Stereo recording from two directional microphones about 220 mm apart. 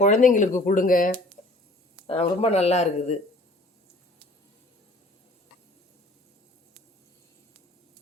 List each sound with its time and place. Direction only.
0.0 s speech: 35° left (ahead or behind)
2.0 s speech: 25° left (ahead or behind)